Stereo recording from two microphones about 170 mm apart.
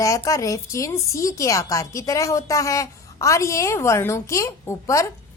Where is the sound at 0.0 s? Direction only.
20° left (ahead or behind).